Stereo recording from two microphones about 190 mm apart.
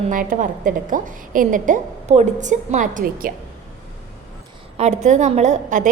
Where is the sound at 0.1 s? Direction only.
45° right (ahead or behind).